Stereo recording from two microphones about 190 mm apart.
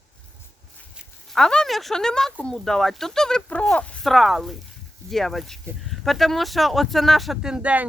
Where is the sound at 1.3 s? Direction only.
5° left (ahead or behind).